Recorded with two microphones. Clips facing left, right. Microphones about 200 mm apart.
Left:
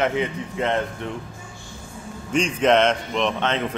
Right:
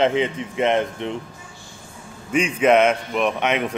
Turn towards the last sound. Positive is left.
turn(degrees=-15)  # may be behind; listen again after turning